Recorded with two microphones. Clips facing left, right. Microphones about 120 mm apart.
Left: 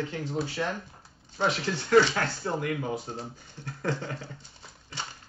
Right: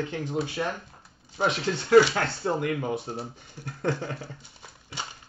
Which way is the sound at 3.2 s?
10° right (ahead or behind).